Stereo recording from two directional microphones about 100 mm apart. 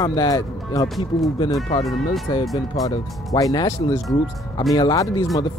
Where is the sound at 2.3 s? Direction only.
50° left (ahead or behind).